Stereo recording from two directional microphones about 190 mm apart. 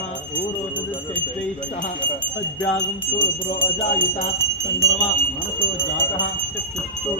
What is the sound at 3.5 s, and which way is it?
Speech, 25° left (ahead or behind).